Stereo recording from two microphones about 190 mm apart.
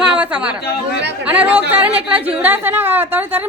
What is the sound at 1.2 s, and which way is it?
A woman's voice, 10° right (ahead or behind).